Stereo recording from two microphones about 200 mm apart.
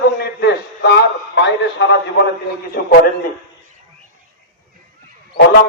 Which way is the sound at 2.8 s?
45° left (ahead or behind).